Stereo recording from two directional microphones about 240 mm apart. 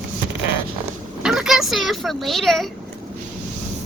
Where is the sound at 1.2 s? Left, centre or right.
Centre.